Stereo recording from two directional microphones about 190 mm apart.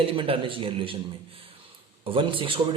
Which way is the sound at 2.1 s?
25° right (ahead or behind).